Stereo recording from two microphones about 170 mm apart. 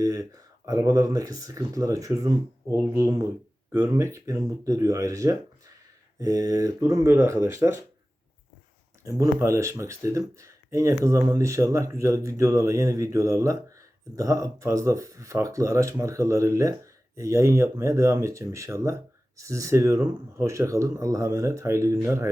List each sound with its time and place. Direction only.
0.0 s speech: 20° right (ahead or behind)
9.0 s speech: 20° right (ahead or behind)